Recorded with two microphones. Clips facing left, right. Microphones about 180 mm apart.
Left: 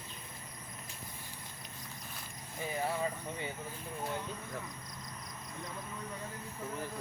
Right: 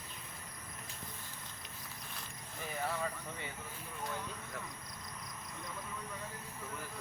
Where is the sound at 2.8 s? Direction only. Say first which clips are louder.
Left 2 dB; 25° left (ahead or behind).